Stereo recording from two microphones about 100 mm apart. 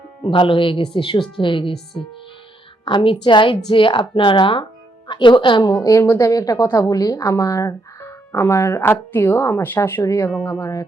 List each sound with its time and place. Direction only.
0.3 s a woman's voice: 60° left (ahead or behind)
5.7 s a woman's voice: 35° left (ahead or behind)
10.0 s speech: 35° left (ahead or behind)